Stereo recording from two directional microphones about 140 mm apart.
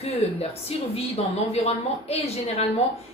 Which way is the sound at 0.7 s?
45° left (ahead or behind).